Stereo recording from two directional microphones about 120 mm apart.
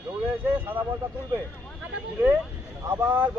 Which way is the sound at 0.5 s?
15° right (ahead or behind).